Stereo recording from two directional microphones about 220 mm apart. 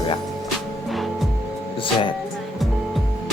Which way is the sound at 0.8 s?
Centre (ahead or behind).